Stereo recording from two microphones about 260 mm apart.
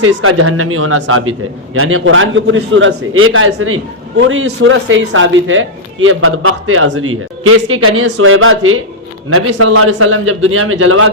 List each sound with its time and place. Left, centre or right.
0.0 s a man's voice: right